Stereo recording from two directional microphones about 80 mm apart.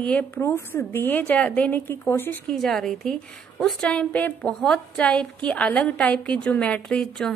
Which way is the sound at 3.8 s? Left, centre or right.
Centre.